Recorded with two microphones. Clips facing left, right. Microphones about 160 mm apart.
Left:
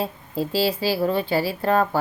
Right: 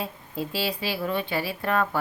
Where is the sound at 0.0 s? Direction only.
30° left (ahead or behind).